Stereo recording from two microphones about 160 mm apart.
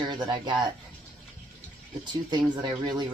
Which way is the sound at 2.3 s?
25° right (ahead or behind).